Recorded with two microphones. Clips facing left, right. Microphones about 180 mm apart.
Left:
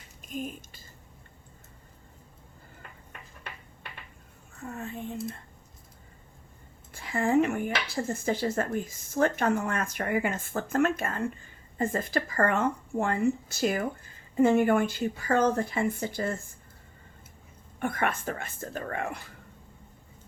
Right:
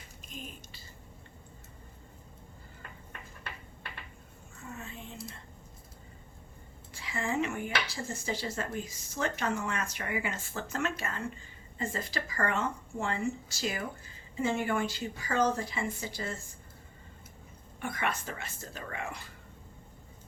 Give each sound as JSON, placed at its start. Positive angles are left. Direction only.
{"t": 0.3, "sound": "a sound", "side_deg": 50}
{"t": 4.6, "sound": "speech", "side_deg": 55}
{"t": 6.9, "sound": "a woman's voice", "side_deg": 50}
{"t": 17.7, "sound": "a woman's voice", "side_deg": 50}